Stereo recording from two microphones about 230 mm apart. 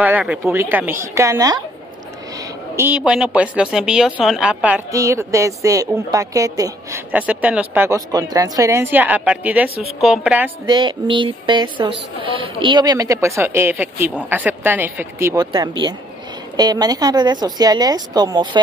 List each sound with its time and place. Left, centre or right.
0.0 s speech: centre
2.7 s a woman's voice: centre
10.7 s speech: centre